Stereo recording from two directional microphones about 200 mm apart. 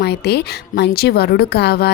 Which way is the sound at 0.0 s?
55° left (ahead or behind).